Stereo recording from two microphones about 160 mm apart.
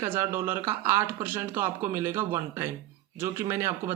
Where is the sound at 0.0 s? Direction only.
15° right (ahead or behind).